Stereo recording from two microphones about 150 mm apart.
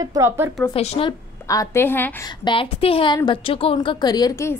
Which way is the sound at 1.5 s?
20° left (ahead or behind).